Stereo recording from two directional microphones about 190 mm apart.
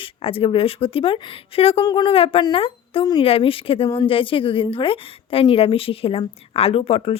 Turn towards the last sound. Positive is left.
turn(degrees=30)  # may be behind; listen again after turning